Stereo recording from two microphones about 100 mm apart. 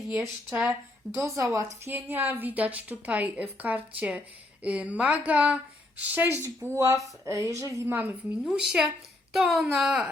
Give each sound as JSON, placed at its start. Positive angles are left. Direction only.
{"t": 0.7, "sound": "speech", "side_deg": -30}
{"t": 1.8, "sound": "a woman's voice", "side_deg": -20}
{"t": 6.4, "sound": "speech", "side_deg": -30}
{"t": 7.9, "sound": "a woman's voice", "side_deg": -15}